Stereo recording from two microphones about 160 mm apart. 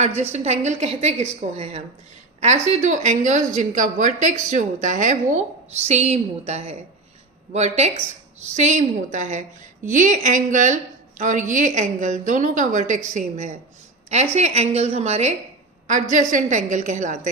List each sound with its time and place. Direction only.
0.0 s a woman's voice: 45° right (ahead or behind)